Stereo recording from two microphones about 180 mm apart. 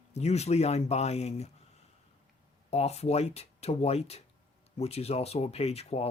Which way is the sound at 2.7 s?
35° left (ahead or behind).